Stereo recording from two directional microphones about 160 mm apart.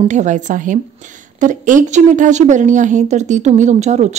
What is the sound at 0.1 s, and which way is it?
A woman's voice, 50° right (ahead or behind).